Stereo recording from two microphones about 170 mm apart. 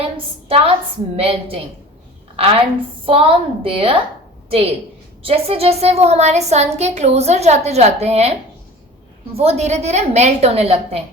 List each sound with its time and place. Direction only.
0.4 s a woman's voice: 35° right (ahead or behind)
9.3 s a woman's voice: 40° right (ahead or behind)